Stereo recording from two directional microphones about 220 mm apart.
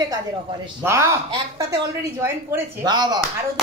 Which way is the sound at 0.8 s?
10° right (ahead or behind).